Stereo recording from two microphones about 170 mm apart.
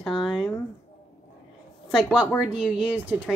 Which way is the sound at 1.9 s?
Centre (ahead or behind).